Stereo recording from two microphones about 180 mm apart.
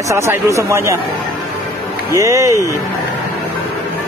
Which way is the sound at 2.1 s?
15° right (ahead or behind).